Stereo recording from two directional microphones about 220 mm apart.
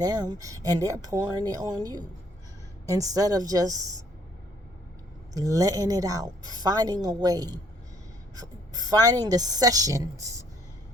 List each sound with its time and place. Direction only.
0.0 s a woman's voice: 20° right (ahead or behind)
5.3 s a woman's voice: 15° right (ahead or behind)